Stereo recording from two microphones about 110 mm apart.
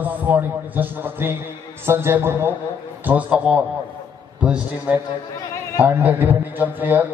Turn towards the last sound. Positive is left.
turn(degrees=-15)  # may be behind; listen again after turning